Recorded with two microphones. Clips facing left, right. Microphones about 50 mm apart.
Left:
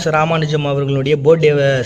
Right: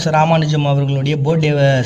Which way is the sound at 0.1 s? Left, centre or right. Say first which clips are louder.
Right 1 dB; centre.